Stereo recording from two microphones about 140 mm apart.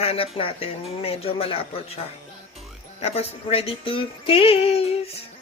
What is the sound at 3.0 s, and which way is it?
Speech, 50° left (ahead or behind).